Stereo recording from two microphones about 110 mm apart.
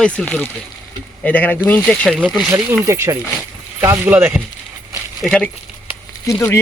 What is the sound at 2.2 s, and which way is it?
Speech, centre (ahead or behind).